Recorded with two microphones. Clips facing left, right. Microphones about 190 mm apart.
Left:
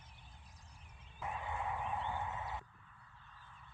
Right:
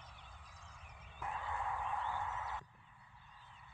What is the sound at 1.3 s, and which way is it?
Dog, 15° left (ahead or behind).